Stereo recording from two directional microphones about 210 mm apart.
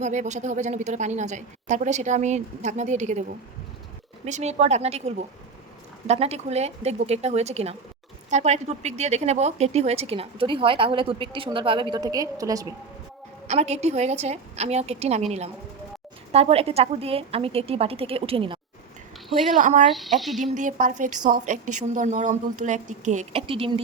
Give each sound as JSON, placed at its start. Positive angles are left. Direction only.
{"t": 0.0, "sound": "a woman's voice", "side_deg": -35}
{"t": 13.5, "sound": "a woman's voice", "side_deg": -30}
{"t": 16.3, "sound": "speech", "side_deg": -30}
{"t": 19.5, "sound": "a woman's voice", "side_deg": -35}
{"t": 19.9, "sound": "a woman's voice", "side_deg": 0}
{"t": 20.4, "sound": "a woman's voice", "side_deg": -35}